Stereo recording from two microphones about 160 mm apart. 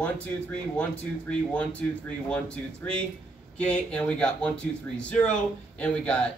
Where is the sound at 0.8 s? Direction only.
10° left (ahead or behind).